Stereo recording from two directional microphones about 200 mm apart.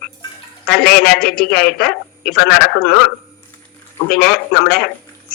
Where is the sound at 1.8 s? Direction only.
5° left (ahead or behind).